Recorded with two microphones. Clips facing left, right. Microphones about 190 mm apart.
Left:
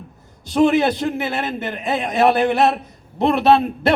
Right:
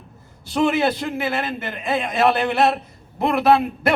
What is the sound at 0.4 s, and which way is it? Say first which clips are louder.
A man's voice: left 4 dB; 20° left (ahead or behind).